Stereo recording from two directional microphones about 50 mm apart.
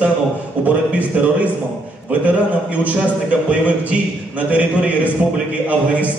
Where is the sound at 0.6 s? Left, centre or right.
Right.